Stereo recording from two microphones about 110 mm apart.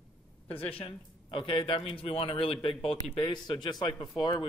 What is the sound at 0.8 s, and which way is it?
Speech, 50° left (ahead or behind).